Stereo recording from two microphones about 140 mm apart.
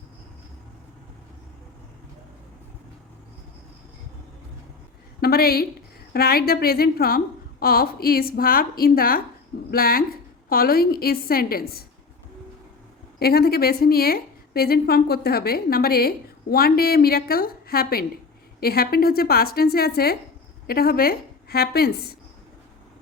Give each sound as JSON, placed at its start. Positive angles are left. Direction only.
{"t": 5.2, "sound": "a woman's voice", "side_deg": 90}
{"t": 13.1, "sound": "a woman's voice", "side_deg": 90}